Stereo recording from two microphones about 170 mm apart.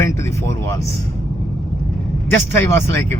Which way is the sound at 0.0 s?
15° left (ahead or behind).